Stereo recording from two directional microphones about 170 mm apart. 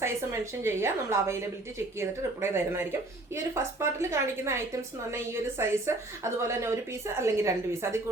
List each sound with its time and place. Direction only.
0.0 s a woman's voice: 15° right (ahead or behind)